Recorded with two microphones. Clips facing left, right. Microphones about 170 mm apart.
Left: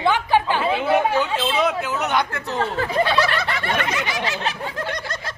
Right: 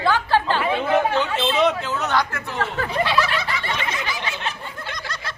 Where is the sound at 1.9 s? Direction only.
15° left (ahead or behind).